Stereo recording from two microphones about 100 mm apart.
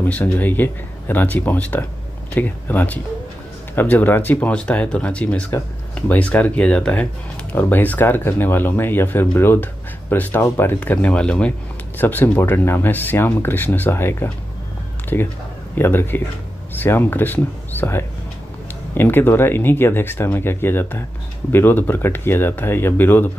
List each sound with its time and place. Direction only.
0.0 s speech: 20° left (ahead or behind)